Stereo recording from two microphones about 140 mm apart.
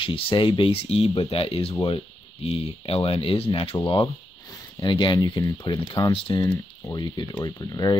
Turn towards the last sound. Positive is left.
turn(degrees=25)  # may be behind; listen again after turning